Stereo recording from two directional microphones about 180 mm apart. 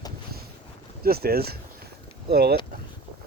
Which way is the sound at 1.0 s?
60° right (ahead or behind).